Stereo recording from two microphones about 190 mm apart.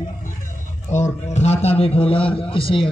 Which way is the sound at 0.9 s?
35° left (ahead or behind).